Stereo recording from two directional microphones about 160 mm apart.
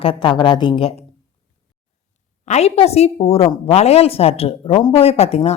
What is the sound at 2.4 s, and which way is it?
A woman's voice, 45° left (ahead or behind).